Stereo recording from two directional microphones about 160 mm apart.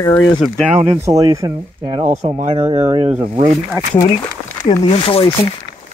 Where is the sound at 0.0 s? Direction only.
25° left (ahead or behind).